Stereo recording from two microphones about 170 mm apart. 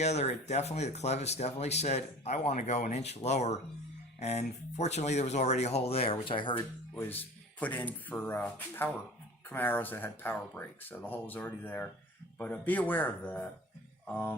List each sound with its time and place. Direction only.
0.0 s speech: 40° left (ahead or behind)
6.9 s speech: 10° left (ahead or behind)